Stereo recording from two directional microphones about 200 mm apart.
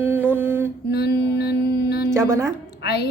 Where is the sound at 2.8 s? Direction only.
55° left (ahead or behind).